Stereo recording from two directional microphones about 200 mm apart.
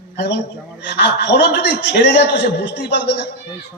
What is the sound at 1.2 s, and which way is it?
A man's voice, 55° left (ahead or behind).